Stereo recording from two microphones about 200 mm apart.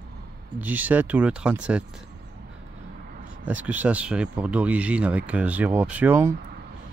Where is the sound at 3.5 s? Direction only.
10° right (ahead or behind).